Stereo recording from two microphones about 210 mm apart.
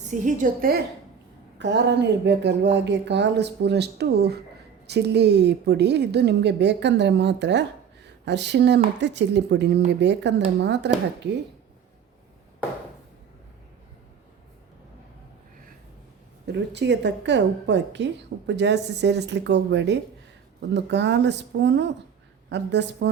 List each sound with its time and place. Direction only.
0.1 s a woman's voice: 35° right (ahead or behind)
1.5 s a woman's voice: 55° right (ahead or behind)
16.5 s a woman's voice: 55° right (ahead or behind)